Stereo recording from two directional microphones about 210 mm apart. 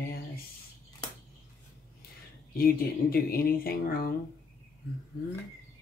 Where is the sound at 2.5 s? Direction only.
45° left (ahead or behind).